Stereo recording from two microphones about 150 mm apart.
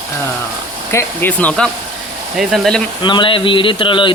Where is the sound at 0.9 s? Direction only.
10° left (ahead or behind).